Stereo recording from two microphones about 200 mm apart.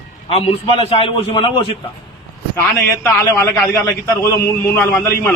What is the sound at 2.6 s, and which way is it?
A man's voice, 10° left (ahead or behind).